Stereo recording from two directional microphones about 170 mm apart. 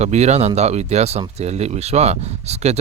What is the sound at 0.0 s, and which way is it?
Speech, 40° right (ahead or behind).